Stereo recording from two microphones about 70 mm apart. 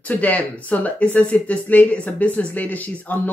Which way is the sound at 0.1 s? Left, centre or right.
Left.